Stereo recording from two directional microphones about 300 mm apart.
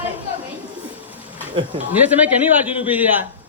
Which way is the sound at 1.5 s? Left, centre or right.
Centre.